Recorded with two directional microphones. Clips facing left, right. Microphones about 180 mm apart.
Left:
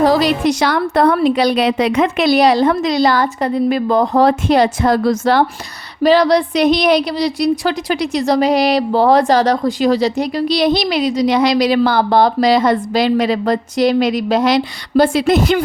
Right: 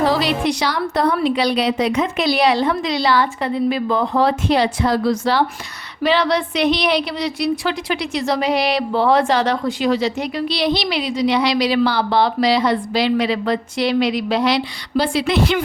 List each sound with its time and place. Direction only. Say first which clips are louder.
0.0 s a woman's voice: left 5 dB; 45° left (ahead or behind)
1.8 s speech: left 4 dB; 60° left (ahead or behind)
2.3 s a woman's voice: left 4 dB; 40° left (ahead or behind)